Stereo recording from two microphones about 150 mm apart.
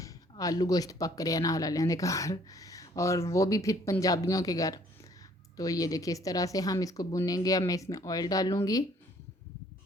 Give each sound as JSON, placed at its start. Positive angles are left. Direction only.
{"t": 0.0, "sound": "speech", "side_deg": 25}